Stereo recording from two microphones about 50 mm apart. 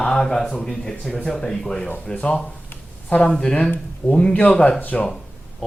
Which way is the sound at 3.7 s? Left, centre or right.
Left.